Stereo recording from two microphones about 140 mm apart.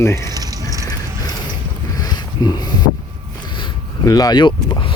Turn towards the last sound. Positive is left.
turn(degrees=30)  # may be behind; listen again after turning